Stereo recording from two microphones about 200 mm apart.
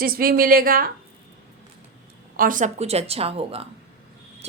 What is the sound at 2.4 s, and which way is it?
A woman's voice, 40° right (ahead or behind).